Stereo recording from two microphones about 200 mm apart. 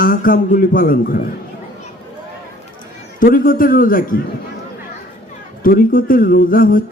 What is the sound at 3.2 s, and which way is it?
A man's voice, 45° left (ahead or behind).